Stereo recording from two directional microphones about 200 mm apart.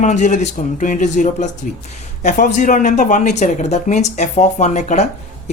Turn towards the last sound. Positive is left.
turn(degrees=35)  # may be behind; listen again after turning